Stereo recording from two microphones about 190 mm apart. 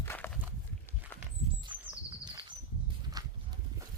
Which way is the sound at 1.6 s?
25° right (ahead or behind).